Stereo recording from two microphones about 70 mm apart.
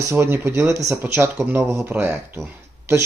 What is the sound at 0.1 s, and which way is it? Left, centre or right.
Speech, right.